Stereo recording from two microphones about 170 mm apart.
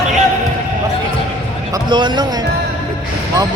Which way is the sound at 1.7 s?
25° right (ahead or behind).